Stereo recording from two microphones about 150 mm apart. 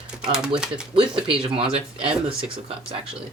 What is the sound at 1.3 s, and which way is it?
Speech, 40° right (ahead or behind).